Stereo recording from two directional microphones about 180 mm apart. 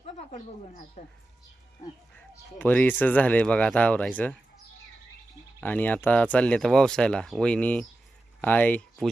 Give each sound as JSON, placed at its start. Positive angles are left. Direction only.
{"t": 0.0, "sound": "speech", "side_deg": 40}
{"t": 2.6, "sound": "speech", "side_deg": 10}
{"t": 5.5, "sound": "speech", "side_deg": 10}